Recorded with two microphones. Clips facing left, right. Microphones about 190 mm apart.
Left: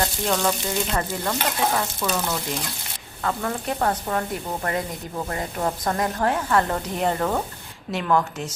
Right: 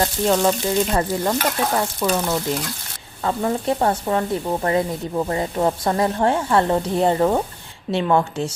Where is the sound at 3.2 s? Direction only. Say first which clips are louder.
Right 5 dB; 25° right (ahead or behind).